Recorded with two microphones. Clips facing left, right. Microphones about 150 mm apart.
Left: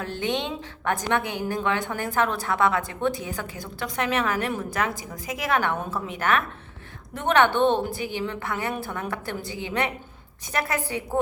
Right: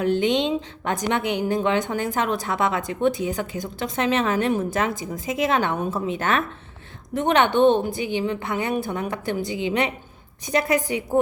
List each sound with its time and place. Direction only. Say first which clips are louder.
0.0 s a woman's voice: right 7 dB; 20° right (ahead or behind)